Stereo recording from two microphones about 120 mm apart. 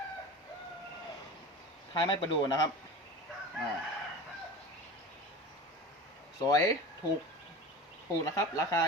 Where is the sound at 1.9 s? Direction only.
40° left (ahead or behind).